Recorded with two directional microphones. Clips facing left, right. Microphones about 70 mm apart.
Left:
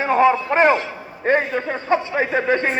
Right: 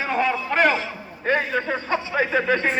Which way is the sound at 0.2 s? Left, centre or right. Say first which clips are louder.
Left 5 dB; left.